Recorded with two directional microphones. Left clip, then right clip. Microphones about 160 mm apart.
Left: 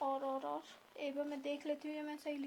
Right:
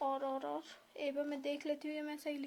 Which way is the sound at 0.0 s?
30° right (ahead or behind).